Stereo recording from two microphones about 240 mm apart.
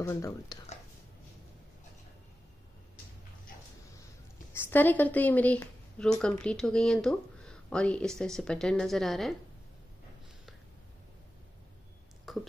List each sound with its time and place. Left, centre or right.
0.0 s speech: centre
4.6 s speech: centre
12.3 s a sound: centre